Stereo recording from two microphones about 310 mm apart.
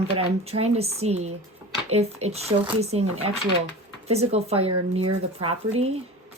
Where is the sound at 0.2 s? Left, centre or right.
Centre.